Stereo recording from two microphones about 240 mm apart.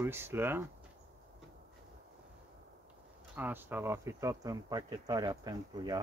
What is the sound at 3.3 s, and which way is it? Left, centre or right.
Speech, centre.